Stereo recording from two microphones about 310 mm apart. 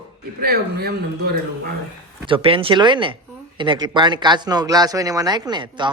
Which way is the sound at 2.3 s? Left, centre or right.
Centre.